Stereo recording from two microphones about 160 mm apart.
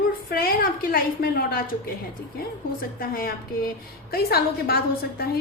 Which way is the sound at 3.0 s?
65° left (ahead or behind).